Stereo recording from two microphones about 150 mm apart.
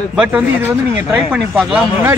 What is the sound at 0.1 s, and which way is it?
Speech, 10° right (ahead or behind).